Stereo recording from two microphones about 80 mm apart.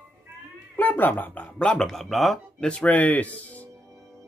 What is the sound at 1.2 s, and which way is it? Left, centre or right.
Speech, left.